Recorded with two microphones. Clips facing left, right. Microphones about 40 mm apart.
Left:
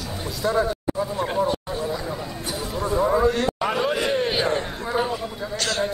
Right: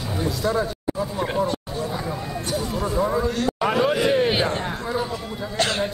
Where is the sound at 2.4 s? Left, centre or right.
Centre.